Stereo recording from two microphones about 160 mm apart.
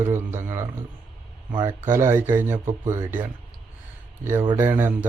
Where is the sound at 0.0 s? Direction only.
15° right (ahead or behind).